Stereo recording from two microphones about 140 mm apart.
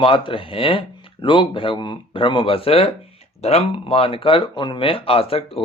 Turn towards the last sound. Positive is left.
turn(degrees=40)  # may be behind; listen again after turning